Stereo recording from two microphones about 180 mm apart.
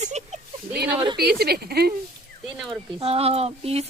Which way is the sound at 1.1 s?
60° right (ahead or behind).